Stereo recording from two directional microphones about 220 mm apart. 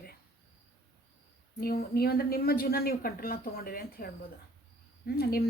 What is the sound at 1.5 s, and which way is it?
A woman's voice, 45° left (ahead or behind).